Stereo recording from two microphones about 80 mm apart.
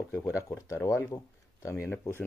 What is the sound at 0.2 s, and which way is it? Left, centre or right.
Speech, left.